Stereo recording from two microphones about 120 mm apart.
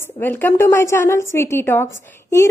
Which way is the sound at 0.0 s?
15° left (ahead or behind).